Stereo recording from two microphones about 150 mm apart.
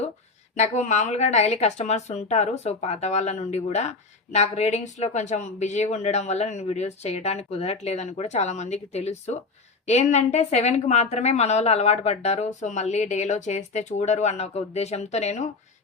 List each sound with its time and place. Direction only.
0.5 s speech: 50° left (ahead or behind)